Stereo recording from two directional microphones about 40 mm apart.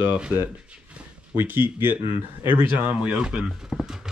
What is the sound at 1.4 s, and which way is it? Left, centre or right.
Speech, right.